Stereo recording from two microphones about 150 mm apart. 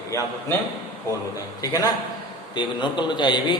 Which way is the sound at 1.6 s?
25° left (ahead or behind).